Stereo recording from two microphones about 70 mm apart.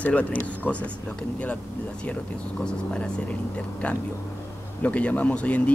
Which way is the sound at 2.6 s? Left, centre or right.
Centre.